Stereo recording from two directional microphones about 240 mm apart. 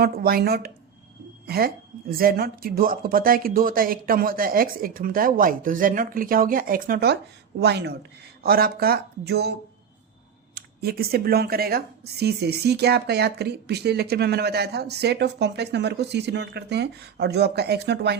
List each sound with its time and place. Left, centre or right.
0.0 s speech: right